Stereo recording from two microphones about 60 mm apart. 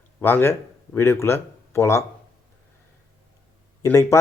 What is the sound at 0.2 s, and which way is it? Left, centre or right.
A man's voice, left.